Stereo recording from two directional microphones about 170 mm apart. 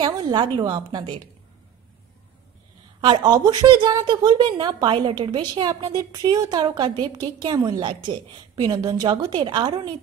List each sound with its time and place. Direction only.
0.0 s a woman's voice: 25° right (ahead or behind)
3.0 s a woman's voice: 25° right (ahead or behind)